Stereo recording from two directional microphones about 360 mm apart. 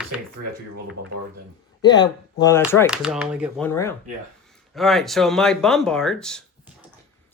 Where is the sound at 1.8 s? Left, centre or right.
Centre.